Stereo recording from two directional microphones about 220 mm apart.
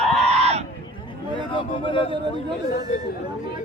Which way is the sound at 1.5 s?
25° left (ahead or behind).